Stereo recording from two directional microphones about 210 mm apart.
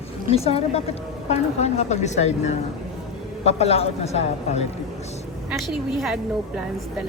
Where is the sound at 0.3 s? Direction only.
30° left (ahead or behind).